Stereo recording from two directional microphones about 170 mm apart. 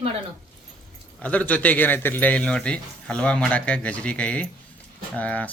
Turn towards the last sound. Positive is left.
turn(degrees=10)  # may be behind; listen again after turning